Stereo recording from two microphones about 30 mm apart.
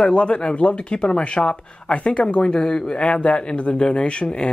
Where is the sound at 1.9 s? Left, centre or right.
Left.